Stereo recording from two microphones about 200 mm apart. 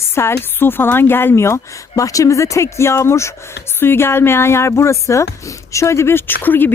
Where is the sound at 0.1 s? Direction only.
10° left (ahead or behind).